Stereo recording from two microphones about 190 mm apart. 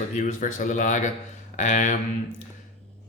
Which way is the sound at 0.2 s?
40° left (ahead or behind).